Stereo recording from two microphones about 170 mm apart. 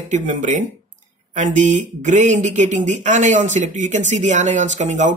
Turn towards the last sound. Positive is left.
turn(degrees=-45)  # may be behind; listen again after turning